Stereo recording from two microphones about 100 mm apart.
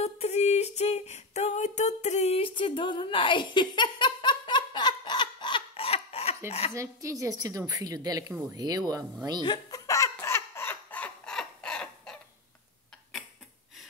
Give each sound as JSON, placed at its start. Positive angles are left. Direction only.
{"t": 0.0, "sound": "female singing", "side_deg": 90}
{"t": 5.8, "sound": "laughter", "side_deg": 80}
{"t": 6.7, "sound": "a woman's voice", "side_deg": -30}
{"t": 8.3, "sound": "speech", "side_deg": -20}
{"t": 8.5, "sound": "a woman's voice", "side_deg": -40}
{"t": 9.4, "sound": "speech", "side_deg": 45}
{"t": 9.8, "sound": "a sound", "side_deg": 30}